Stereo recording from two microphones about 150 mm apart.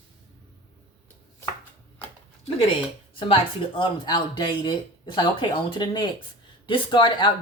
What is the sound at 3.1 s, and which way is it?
Speech, 35° left (ahead or behind).